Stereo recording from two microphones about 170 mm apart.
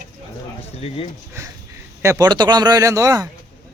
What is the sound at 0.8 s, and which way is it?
Speech, 35° left (ahead or behind).